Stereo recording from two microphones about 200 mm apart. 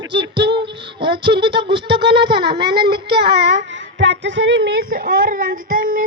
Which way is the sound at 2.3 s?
55° right (ahead or behind).